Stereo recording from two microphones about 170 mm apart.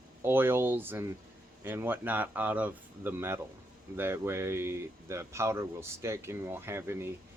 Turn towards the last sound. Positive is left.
turn(degrees=-15)  # may be behind; listen again after turning